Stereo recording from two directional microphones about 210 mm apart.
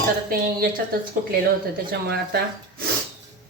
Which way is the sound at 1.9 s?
50° right (ahead or behind).